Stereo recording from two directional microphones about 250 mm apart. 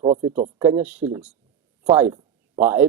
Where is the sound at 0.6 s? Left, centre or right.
Centre.